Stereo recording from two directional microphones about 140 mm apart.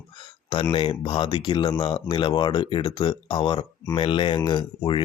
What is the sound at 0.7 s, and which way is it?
Speech, 35° left (ahead or behind).